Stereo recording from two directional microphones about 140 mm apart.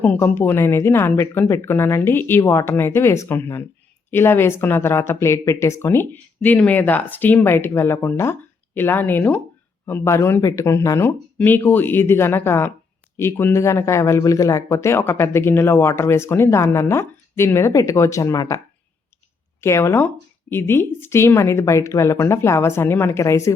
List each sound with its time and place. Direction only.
0.0 s speech: 10° left (ahead or behind)
19.6 s speech: 20° left (ahead or behind)